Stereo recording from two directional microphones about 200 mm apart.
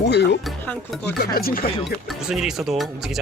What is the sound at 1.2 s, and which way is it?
Speech, 50° left (ahead or behind).